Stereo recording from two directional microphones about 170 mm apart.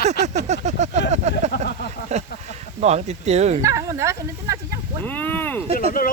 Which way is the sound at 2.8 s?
40° right (ahead or behind).